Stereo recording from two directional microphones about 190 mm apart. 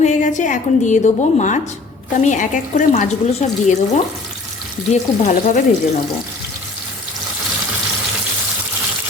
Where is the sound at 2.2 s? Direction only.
40° left (ahead or behind).